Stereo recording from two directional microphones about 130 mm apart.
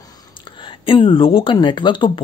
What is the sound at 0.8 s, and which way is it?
Speech, 40° left (ahead or behind).